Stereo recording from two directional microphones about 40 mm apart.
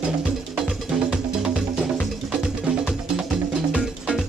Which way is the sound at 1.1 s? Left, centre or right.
Centre.